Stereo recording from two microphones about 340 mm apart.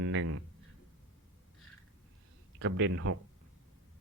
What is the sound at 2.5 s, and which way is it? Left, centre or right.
Speech, right.